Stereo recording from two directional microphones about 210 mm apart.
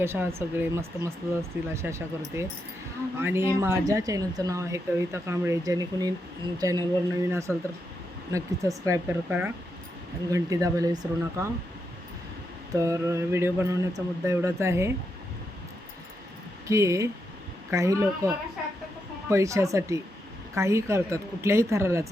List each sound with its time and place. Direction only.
0.0 s speech: 10° right (ahead or behind)
12.7 s speech: 15° right (ahead or behind)
16.6 s speech: 15° right (ahead or behind)